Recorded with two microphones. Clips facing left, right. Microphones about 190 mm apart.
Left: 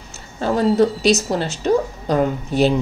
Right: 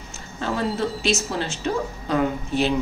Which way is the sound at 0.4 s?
40° left (ahead or behind).